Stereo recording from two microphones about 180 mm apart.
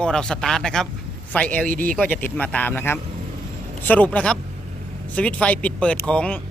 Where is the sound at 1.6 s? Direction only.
50° right (ahead or behind).